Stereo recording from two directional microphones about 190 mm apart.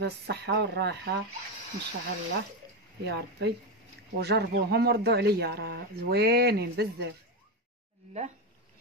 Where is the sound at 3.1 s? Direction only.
60° right (ahead or behind).